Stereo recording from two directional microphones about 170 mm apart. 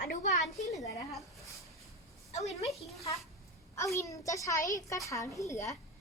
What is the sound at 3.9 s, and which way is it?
A woman's voice, 20° left (ahead or behind).